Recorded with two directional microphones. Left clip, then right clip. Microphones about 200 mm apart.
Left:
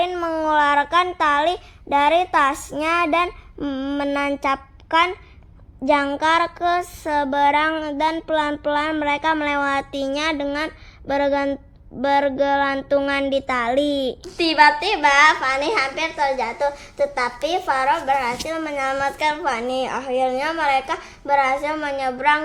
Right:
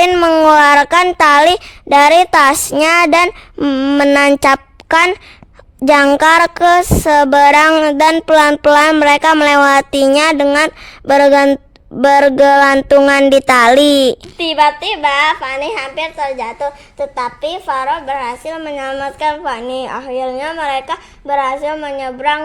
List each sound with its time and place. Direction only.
0.0 s speech: 60° right (ahead or behind)
5.8 s a sound: 60° right (ahead or behind)
14.3 s a woman's voice: 10° right (ahead or behind)